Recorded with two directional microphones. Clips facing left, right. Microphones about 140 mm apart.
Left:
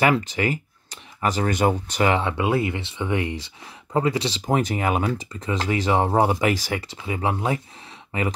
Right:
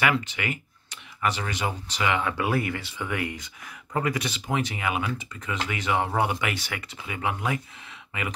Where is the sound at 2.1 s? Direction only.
25° left (ahead or behind).